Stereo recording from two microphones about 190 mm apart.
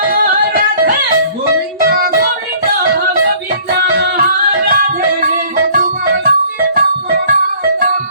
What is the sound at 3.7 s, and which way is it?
Music, 55° right (ahead or behind).